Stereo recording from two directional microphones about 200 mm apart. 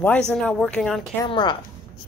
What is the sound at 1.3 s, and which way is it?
Speech, 25° left (ahead or behind).